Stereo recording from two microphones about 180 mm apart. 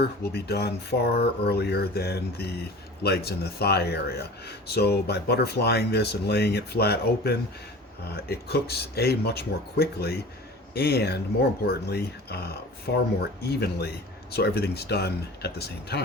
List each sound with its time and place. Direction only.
0.0 s speech: 60° left (ahead or behind)